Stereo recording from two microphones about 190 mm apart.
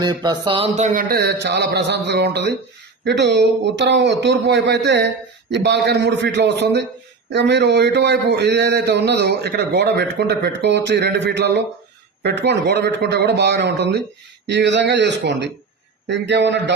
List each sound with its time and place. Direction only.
0.0 s a man's voice: 20° right (ahead or behind); by 16.7 s 70° right (ahead or behind)